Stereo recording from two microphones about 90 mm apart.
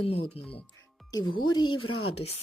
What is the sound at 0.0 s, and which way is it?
Speech, 90° left.